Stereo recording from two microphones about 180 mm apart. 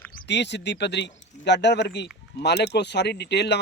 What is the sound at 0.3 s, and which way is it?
Speech, 75° left (ahead or behind).